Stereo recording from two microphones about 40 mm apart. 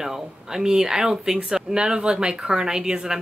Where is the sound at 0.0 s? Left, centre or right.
Centre.